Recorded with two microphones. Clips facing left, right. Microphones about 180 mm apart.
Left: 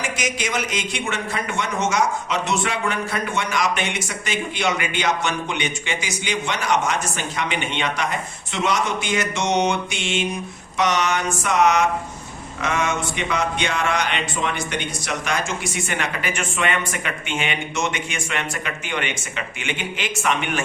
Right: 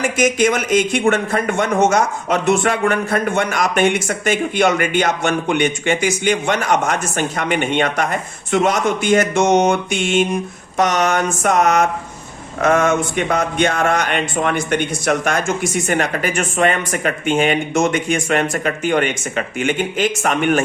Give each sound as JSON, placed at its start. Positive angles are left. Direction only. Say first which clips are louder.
{"t": 0.0, "sound": "a man's voice", "louder": "right 11 dB", "side_deg": -50}